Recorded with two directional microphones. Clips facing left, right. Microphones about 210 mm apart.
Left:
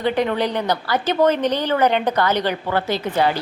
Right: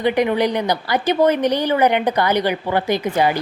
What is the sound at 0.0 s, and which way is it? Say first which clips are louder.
A woman's voice: right 3 dB; 15° right (ahead or behind).